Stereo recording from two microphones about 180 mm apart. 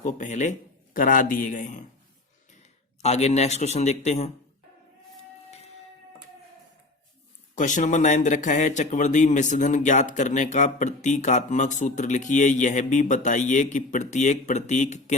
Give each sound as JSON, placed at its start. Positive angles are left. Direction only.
{"t": 0.0, "sound": "speech", "side_deg": 45}
{"t": 3.0, "sound": "a man's voice", "side_deg": 35}
{"t": 5.5, "sound": "a sound", "side_deg": 35}
{"t": 7.5, "sound": "speech", "side_deg": 45}